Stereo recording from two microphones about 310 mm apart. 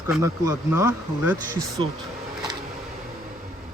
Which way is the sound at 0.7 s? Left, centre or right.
Left.